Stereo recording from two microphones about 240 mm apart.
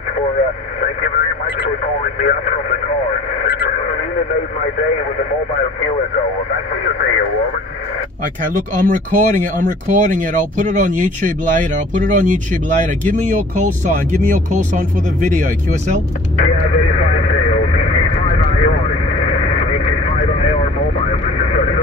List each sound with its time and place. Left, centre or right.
2.1 s speech: left
8.8 s speech: right
16.4 s radio: left
21.1 s vehicle: left